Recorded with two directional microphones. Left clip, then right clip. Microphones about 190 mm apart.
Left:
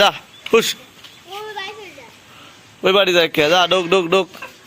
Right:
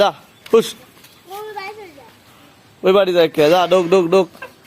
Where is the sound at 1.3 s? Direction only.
65° right (ahead or behind).